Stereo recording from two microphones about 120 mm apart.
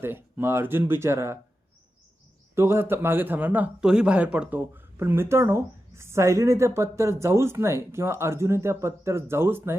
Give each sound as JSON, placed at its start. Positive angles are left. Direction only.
{"t": 0.0, "sound": "a man's voice", "side_deg": -20}
{"t": 2.6, "sound": "a man's voice", "side_deg": -20}